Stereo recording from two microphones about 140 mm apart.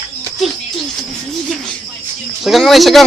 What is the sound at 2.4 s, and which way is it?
Speech, centre (ahead or behind).